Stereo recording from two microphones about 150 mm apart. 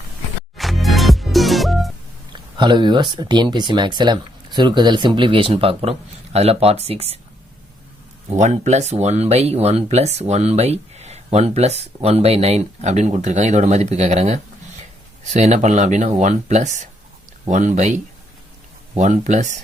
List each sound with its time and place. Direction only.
0.5 s music: centre (ahead or behind)
2.3 s speech: 30° right (ahead or behind)
8.3 s speech: 50° right (ahead or behind)